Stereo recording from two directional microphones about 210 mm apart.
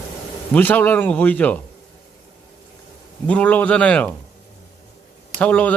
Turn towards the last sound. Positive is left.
turn(degrees=5)  # may be behind; listen again after turning